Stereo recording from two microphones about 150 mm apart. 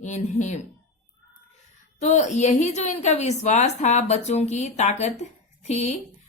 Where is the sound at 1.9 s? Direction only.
50° left (ahead or behind).